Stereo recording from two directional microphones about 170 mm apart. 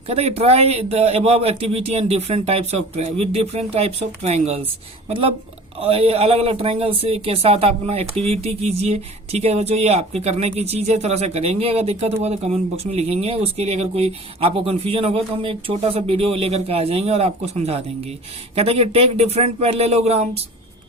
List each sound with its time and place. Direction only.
0.1 s speech: 35° right (ahead or behind)